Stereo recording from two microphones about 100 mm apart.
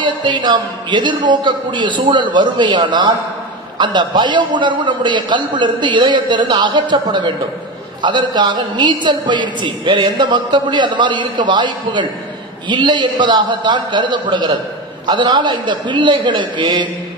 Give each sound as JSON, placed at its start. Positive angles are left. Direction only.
{"t": 0.0, "sound": "a woman's voice", "side_deg": -55}